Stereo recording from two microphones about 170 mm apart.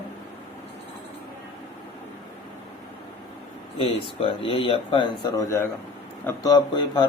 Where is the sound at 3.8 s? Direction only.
35° left (ahead or behind).